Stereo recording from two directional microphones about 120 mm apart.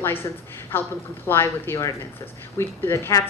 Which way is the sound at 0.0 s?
20° left (ahead or behind).